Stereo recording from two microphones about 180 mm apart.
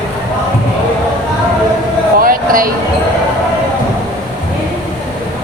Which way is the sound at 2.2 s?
50° right (ahead or behind).